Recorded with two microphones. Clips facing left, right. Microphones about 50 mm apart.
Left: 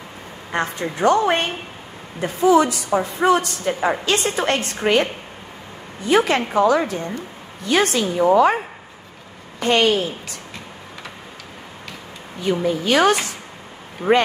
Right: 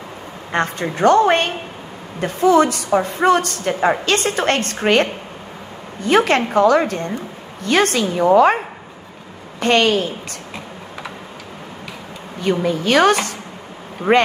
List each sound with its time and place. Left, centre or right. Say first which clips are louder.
0.5 s a woman's voice: right 3 dB; right
6.0 s a woman's voice: right 2 dB; right
9.6 s a woman's voice: right 2 dB; right
12.4 s a woman's voice: right 2 dB; right